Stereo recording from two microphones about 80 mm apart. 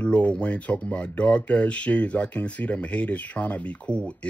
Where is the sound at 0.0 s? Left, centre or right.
Centre.